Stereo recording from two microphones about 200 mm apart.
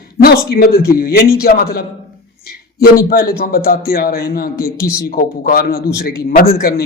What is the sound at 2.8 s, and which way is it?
A man's voice, 45° left (ahead or behind).